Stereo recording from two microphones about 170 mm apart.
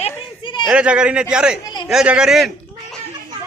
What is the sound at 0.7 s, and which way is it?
Speech, 5° right (ahead or behind).